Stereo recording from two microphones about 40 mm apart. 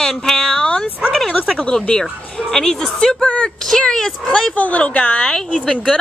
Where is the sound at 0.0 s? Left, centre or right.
Centre.